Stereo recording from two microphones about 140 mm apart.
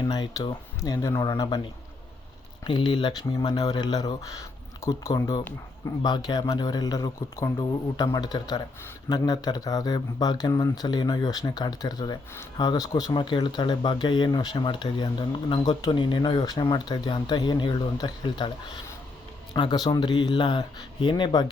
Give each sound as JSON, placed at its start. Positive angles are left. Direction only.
{"t": 0.0, "sound": "speech", "side_deg": 25}
{"t": 2.6, "sound": "speech", "side_deg": 35}
{"t": 19.5, "sound": "speech", "side_deg": 30}